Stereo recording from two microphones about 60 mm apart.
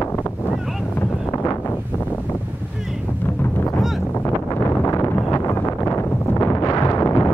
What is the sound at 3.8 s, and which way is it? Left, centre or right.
Boat, centre.